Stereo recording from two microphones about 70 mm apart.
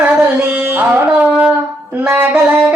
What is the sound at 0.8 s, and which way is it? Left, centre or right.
Carnatic music, right.